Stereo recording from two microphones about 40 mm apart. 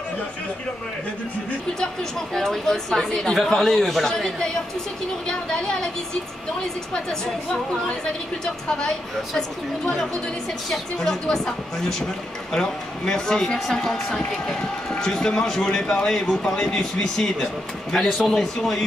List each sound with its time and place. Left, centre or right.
1.8 s a woman's voice: centre
9.3 s speech: centre